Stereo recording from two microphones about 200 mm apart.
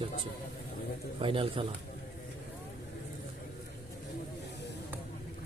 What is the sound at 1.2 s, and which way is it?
Speech, 25° right (ahead or behind).